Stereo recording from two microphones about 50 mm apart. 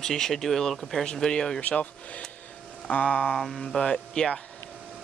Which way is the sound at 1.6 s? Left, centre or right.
Left.